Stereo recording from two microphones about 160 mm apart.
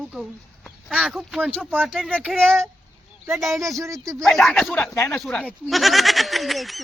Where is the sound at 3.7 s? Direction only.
20° right (ahead or behind).